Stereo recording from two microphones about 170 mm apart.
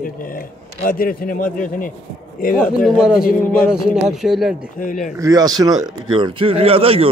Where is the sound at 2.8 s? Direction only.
5° left (ahead or behind).